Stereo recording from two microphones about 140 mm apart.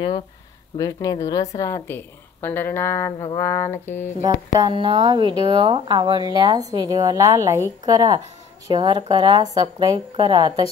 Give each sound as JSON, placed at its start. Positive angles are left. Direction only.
{"t": 0.7, "sound": "a woman's voice", "side_deg": 25}
{"t": 4.6, "sound": "speech", "side_deg": -35}